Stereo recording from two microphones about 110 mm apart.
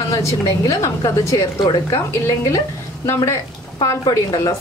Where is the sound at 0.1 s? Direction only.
30° left (ahead or behind).